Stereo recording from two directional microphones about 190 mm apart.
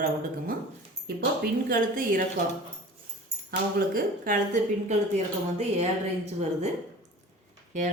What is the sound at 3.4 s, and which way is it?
Speech, 50° right (ahead or behind).